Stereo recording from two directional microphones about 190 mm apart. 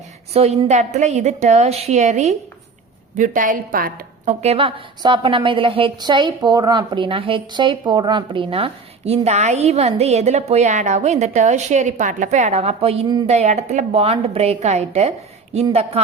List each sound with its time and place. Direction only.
0.3 s a woman's voice: 35° right (ahead or behind)
4.4 s a woman's voice: 30° right (ahead or behind)